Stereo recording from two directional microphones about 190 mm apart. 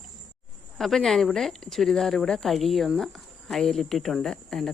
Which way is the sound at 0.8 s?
Centre (ahead or behind).